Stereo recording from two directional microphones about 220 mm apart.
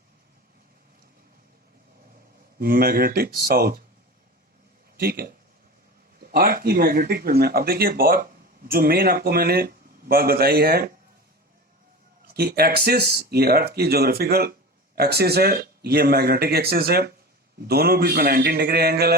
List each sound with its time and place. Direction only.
2.6 s speech: 45° right (ahead or behind)
4.9 s speech: 45° right (ahead or behind)
12.3 s speech: 45° right (ahead or behind)